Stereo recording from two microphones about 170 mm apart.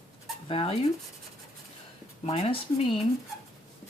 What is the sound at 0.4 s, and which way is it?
Speech, 35° left (ahead or behind).